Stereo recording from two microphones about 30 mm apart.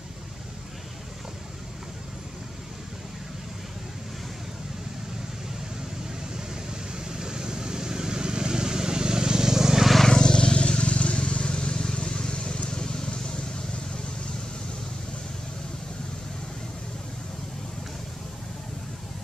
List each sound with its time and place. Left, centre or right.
6.3 s vehicle: right
10.0 s vehicle: left